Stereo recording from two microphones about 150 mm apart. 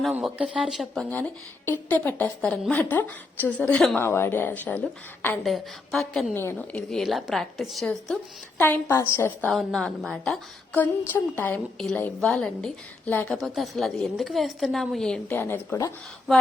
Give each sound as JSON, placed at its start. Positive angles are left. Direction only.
{"t": 0.0, "sound": "a woman's voice", "side_deg": -5}
{"t": 1.1, "sound": "a woman's voice", "side_deg": 10}
{"t": 5.4, "sound": "a woman's voice", "side_deg": 0}
{"t": 6.3, "sound": "a woman's voice", "side_deg": 15}
{"t": 9.5, "sound": "a woman's voice", "side_deg": 0}
{"t": 10.8, "sound": "a woman's voice", "side_deg": 15}